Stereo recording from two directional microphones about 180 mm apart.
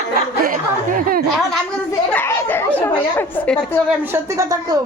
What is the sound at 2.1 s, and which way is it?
A woman's voice, 10° left (ahead or behind).